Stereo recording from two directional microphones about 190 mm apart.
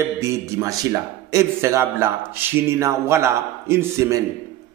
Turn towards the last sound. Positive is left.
turn(degrees=-15)  # may be behind; listen again after turning